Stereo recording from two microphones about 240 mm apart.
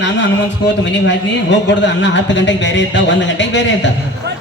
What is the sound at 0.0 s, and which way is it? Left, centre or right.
A man's voice, left.